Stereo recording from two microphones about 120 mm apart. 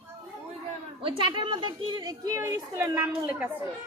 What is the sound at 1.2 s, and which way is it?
Speech, 45° right (ahead or behind).